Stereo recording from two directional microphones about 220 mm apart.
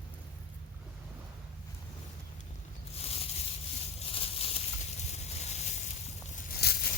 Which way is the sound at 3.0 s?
30° left (ahead or behind).